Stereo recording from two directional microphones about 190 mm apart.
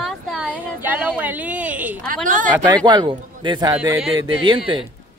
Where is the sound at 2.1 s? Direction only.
45° right (ahead or behind).